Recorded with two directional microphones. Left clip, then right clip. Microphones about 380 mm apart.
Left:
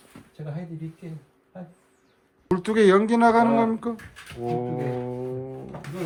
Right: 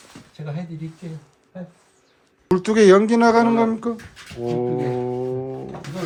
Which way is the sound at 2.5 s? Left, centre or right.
Centre.